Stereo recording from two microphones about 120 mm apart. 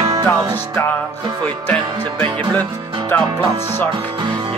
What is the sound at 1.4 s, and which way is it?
Music, 15° left (ahead or behind).